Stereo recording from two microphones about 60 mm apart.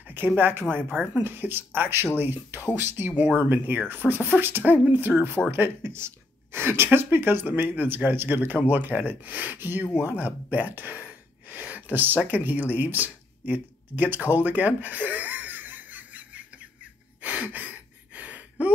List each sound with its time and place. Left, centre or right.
0.4 s speech: right
17.2 s gasp: right